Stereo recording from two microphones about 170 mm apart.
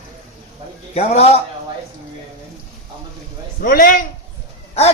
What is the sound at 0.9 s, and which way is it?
Speech, 40° left (ahead or behind).